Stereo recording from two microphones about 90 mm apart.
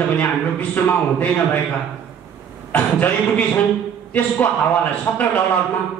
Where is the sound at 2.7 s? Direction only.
20° left (ahead or behind).